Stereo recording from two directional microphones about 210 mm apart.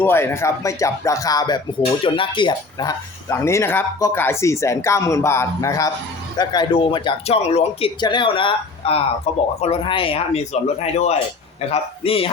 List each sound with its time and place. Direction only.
0.0 s speech: 10° left (ahead or behind); by 12.3 s 25° left (ahead or behind)